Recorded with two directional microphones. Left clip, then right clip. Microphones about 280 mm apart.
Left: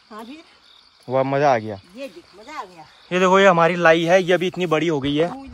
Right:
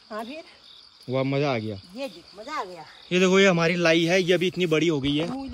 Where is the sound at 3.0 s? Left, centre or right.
Centre.